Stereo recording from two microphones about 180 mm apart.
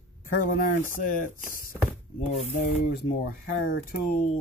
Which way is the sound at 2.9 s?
60° left (ahead or behind).